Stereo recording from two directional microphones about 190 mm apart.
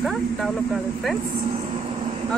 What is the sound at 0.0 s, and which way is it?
Vehicle, centre (ahead or behind).